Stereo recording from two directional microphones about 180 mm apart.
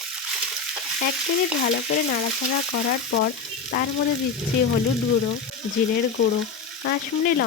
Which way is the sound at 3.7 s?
60° left (ahead or behind).